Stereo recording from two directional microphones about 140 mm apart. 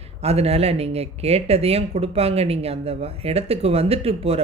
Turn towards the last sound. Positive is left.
turn(degrees=-45)  # may be behind; listen again after turning